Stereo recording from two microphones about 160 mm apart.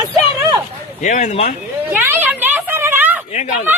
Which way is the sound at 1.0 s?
50° left (ahead or behind).